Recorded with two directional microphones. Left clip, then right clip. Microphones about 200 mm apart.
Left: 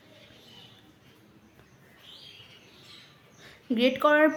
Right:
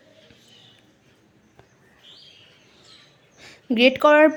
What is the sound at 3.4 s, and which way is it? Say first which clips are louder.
Speech: right 8 dB; 30° right (ahead or behind).